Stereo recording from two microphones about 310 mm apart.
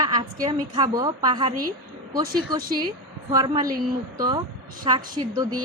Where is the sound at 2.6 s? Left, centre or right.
Right.